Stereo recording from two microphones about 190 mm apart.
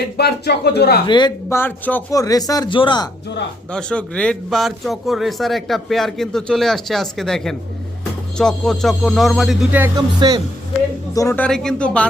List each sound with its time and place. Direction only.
0.2 s speech: 60° left (ahead or behind)
1.0 s speech: 25° left (ahead or behind)
1.5 s speech: 10° left (ahead or behind)
3.7 s a man's voice: 5° left (ahead or behind)
10.2 s speech: 25° right (ahead or behind)
11.1 s speech: 15° left (ahead or behind)
11.4 s a man's voice: 5° left (ahead or behind)